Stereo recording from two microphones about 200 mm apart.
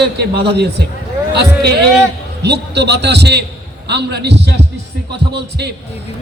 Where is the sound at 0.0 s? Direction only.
55° right (ahead or behind).